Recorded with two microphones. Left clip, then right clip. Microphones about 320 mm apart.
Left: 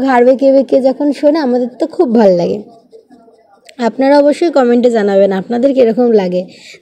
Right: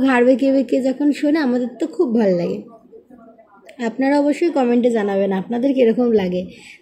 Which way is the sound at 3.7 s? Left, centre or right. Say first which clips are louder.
Left 9 dB; left.